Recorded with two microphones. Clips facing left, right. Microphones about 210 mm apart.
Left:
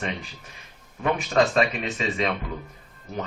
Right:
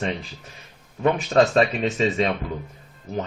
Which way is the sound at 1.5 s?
30° right (ahead or behind).